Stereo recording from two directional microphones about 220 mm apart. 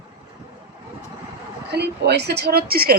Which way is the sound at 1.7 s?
50° right (ahead or behind).